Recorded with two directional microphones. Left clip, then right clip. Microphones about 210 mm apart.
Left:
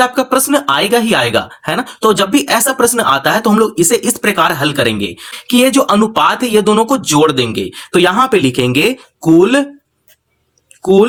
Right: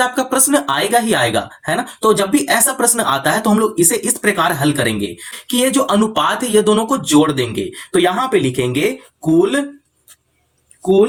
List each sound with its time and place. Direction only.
0.0 s speech: 25° left (ahead or behind)